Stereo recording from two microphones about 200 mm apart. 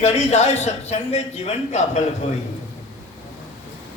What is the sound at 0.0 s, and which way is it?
A man's voice, 35° left (ahead or behind).